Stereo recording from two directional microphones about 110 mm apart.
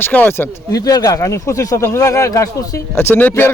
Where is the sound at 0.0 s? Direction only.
15° left (ahead or behind).